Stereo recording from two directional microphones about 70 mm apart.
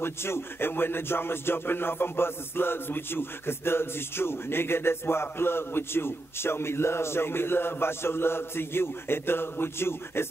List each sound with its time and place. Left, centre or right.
0.0 s speech: left